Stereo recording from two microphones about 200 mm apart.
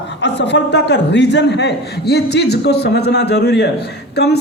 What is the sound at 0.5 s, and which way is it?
A man's voice, 60° left (ahead or behind).